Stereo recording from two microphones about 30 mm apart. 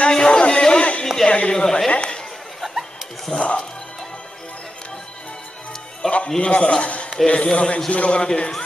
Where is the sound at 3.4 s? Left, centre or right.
Left.